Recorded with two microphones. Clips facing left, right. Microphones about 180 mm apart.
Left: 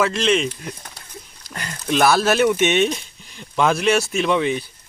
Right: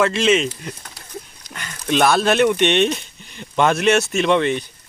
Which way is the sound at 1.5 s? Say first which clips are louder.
Left 3 dB; 35° left (ahead or behind).